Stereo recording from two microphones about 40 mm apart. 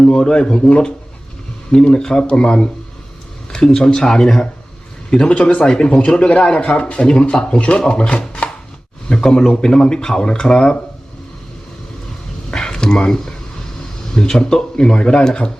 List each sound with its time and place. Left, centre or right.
0.0 s speech: centre
5.3 s speech: left
9.0 s speech: centre
12.5 s speech: centre